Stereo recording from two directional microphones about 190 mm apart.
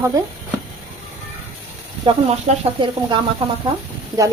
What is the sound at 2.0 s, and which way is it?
Speech, 25° right (ahead or behind).